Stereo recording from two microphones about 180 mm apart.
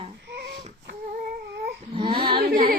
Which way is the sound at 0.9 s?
65° right (ahead or behind).